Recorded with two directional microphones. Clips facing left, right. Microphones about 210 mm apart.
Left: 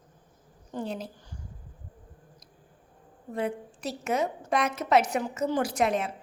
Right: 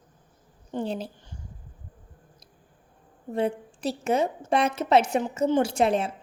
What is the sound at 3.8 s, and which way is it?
A woman's voice, 30° right (ahead or behind).